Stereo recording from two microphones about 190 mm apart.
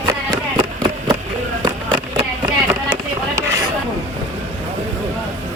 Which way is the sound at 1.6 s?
25° right (ahead or behind).